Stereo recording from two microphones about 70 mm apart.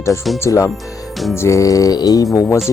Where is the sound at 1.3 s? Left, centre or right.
Left.